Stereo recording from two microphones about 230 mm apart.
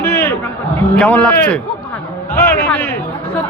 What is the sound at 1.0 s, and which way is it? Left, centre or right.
Speech, centre.